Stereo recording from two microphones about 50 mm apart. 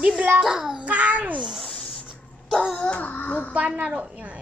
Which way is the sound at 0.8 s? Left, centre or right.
Right.